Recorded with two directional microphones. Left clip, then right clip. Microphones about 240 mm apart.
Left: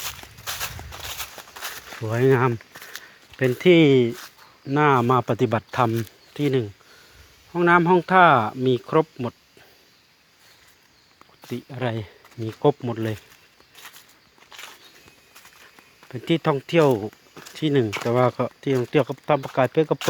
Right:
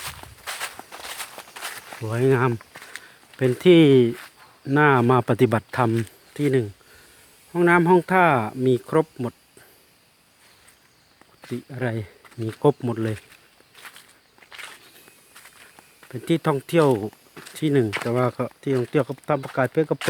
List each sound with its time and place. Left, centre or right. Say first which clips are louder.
0.0 s a sound: left 1 dB; left
2.0 s speech: left 1 dB; centre
11.5 s speech: even; centre
13.7 s a sound: right 1 dB; left
16.1 s speech: left 1 dB; centre
18.1 s speech: left 3 dB; centre